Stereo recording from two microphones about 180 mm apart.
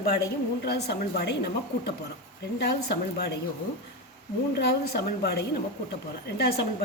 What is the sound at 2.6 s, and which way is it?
Speech, 65° left (ahead or behind).